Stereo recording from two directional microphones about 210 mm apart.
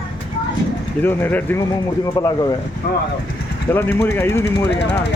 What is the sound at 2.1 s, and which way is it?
Speech, 20° left (ahead or behind).